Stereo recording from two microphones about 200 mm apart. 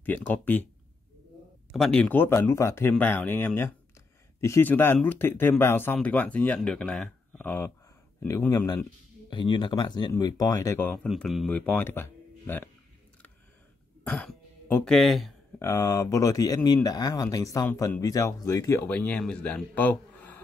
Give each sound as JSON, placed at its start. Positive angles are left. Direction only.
{"t": 0.0, "sound": "speech", "side_deg": 10}
{"t": 1.7, "sound": "speech", "side_deg": 5}
{"t": 11.1, "sound": "speech", "side_deg": 0}
{"t": 14.0, "sound": "speech", "side_deg": 5}
{"t": 15.6, "sound": "speech", "side_deg": 15}